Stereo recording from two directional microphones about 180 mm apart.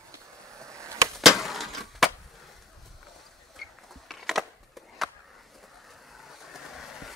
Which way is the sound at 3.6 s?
Centre (ahead or behind).